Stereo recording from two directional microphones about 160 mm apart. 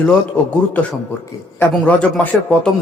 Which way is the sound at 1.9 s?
10° left (ahead or behind).